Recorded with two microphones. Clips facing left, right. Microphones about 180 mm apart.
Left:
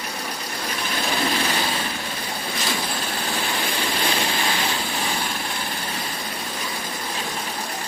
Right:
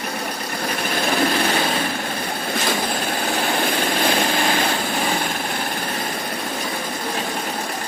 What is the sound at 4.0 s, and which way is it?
Vehicle, 50° right (ahead or behind).